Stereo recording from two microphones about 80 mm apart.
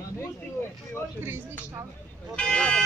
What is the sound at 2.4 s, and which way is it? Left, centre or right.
Speech, centre.